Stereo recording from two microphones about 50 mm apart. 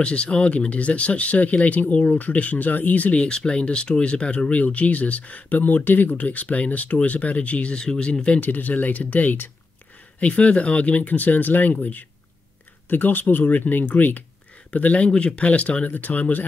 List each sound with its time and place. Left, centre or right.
0.0 s speech: left
3.2 s speech: centre
8.4 s speech: left